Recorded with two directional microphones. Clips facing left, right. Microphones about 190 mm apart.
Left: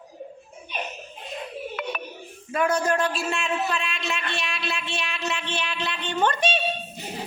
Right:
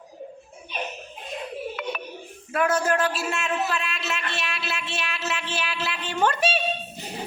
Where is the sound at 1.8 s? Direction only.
50° left (ahead or behind).